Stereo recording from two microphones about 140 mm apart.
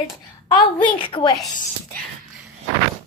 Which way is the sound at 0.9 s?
40° left (ahead or behind).